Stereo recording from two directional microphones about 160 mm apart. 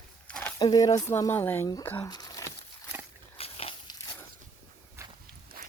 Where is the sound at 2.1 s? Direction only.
25° left (ahead or behind).